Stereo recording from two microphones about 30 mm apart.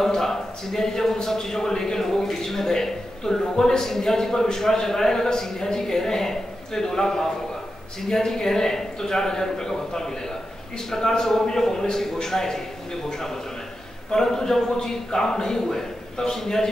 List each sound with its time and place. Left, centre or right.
0.0 s a man's voice: centre
14.1 s a man's voice: centre